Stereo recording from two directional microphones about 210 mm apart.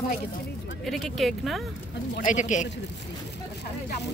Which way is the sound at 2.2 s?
35° left (ahead or behind).